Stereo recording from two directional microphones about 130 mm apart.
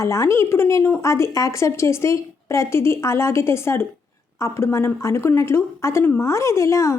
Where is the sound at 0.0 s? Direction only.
20° left (ahead or behind).